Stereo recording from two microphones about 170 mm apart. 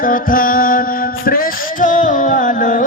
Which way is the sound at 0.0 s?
55° left (ahead or behind).